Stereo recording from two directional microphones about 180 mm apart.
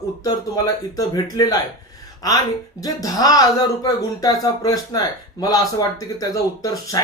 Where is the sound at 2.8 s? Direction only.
20° left (ahead or behind).